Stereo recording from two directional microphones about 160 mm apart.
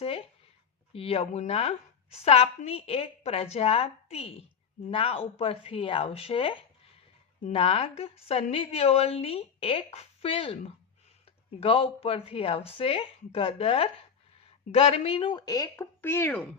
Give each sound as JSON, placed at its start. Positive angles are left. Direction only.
{"t": 0.0, "sound": "a woman's voice", "side_deg": 35}